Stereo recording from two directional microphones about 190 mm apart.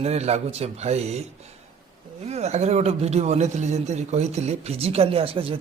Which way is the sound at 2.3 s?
35° right (ahead or behind).